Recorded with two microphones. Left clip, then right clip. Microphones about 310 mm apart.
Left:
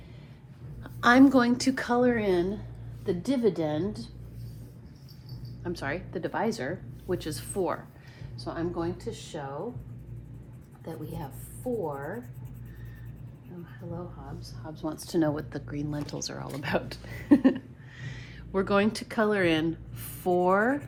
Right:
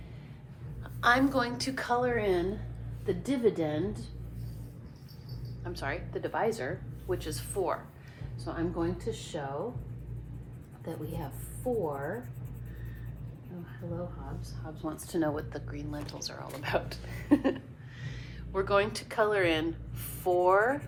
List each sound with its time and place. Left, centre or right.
0.9 s speech: left
3.1 s a woman's voice: centre
5.6 s speech: left
8.4 s a woman's voice: centre
10.8 s speech: centre
14.6 s a woman's voice: centre
15.3 s a woman's voice: left